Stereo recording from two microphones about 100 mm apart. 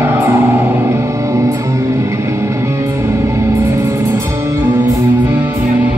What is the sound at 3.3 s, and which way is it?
Music, 25° right (ahead or behind).